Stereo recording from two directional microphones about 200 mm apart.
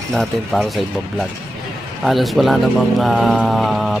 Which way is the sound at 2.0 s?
Centre (ahead or behind).